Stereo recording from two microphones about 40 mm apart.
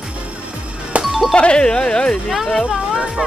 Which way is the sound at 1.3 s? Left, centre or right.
Left.